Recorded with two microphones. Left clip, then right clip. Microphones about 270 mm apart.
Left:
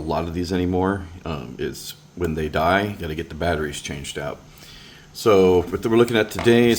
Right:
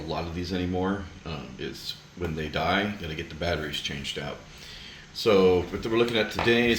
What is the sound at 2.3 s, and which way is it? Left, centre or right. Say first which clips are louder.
Speech: left 7 dB; centre.